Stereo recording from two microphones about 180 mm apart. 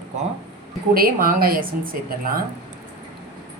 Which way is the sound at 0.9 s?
55° right (ahead or behind).